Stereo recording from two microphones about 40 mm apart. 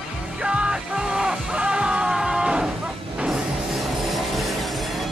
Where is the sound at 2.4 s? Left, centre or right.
Centre.